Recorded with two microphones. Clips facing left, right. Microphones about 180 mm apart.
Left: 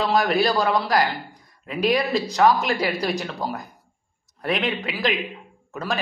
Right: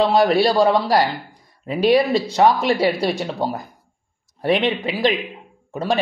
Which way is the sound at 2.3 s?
25° right (ahead or behind).